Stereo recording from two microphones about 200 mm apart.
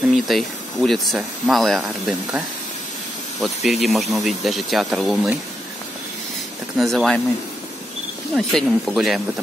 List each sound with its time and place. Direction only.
0.1 s speech: centre (ahead or behind)
6.8 s speech: centre (ahead or behind)
8.4 s speech: centre (ahead or behind)